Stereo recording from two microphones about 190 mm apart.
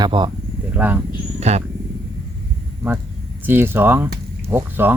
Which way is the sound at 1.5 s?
35° right (ahead or behind).